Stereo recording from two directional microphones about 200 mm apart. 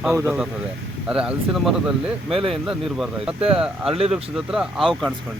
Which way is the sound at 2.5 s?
Centre (ahead or behind).